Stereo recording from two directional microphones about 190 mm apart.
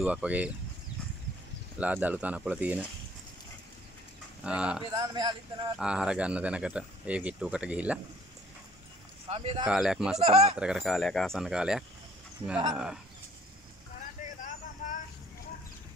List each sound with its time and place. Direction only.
0.0 s speech: 5° right (ahead or behind)
1.8 s speech: 10° right (ahead or behind)
4.5 s speech: 5° right (ahead or behind)
4.9 s speech: 20° right (ahead or behind)
5.8 s speech: 5° right (ahead or behind)
9.3 s speech: 30° right (ahead or behind)
9.7 s speech: 5° right (ahead or behind)
10.1 s speech: 35° right (ahead or behind)
10.6 s speech: centre (ahead or behind)
14.2 s vehicle: 40° left (ahead or behind)